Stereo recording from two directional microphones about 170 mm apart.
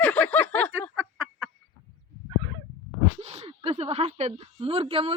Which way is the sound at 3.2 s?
40° right (ahead or behind).